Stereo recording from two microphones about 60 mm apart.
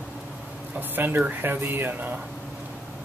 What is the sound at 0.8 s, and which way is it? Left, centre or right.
Speech, right.